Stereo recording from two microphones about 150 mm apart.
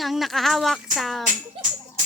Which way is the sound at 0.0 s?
Centre (ahead or behind).